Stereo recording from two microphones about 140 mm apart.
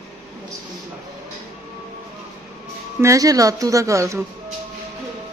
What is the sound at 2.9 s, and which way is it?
Speech, 20° right (ahead or behind).